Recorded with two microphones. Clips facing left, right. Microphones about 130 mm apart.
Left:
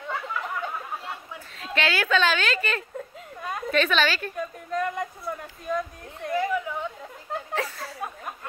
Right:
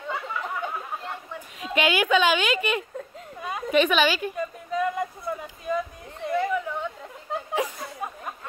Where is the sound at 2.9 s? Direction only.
Centre (ahead or behind).